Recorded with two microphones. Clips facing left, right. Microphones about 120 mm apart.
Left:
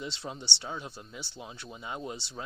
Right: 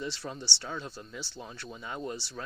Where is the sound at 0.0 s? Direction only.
20° left (ahead or behind).